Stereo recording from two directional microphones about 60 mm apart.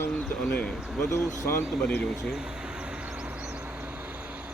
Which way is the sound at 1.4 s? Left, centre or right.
Left.